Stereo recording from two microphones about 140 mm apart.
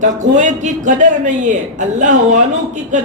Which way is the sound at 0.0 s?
60° right (ahead or behind).